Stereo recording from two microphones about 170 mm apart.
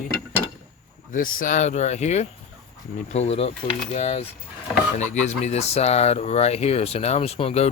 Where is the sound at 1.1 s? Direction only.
55° left (ahead or behind).